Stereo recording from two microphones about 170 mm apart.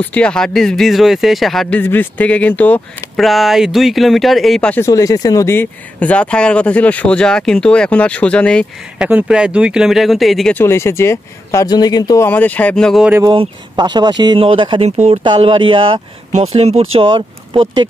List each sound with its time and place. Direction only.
0.0 s speech: 5° left (ahead or behind)
8.9 s speech: 5° right (ahead or behind)
10.6 s speech: 15° left (ahead or behind)
12.3 s speech: 10° left (ahead or behind)
13.3 s speech: 25° right (ahead or behind)